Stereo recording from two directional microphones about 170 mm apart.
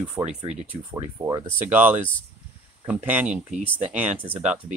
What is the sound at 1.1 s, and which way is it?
Speech, 15° right (ahead or behind).